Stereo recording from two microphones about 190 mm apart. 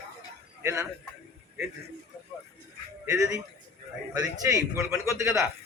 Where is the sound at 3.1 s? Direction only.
15° right (ahead or behind).